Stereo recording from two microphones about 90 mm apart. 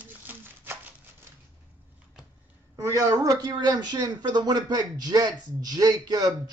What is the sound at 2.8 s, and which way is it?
A woman's voice, 35° right (ahead or behind).